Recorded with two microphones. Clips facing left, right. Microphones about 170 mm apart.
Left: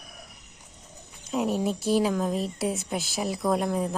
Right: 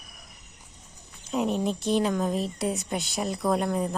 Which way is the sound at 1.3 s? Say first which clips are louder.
Even; 5° left (ahead or behind).